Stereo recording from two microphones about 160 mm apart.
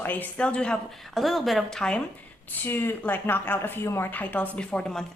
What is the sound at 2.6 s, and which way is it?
Speech, 15° left (ahead or behind).